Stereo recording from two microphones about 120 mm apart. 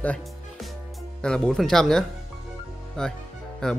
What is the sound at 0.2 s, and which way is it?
Music, centre (ahead or behind).